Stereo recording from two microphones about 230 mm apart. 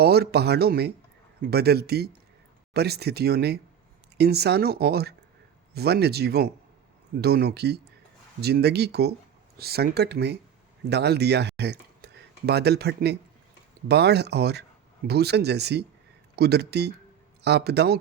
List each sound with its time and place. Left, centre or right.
0.0 s speech: right